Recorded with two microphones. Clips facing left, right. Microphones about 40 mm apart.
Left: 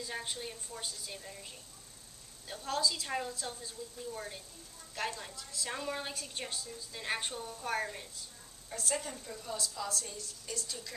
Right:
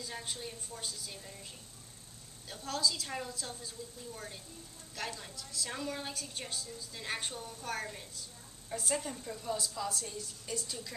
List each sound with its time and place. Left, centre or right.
0.0 s a woman's voice: centre
8.9 s a woman's voice: centre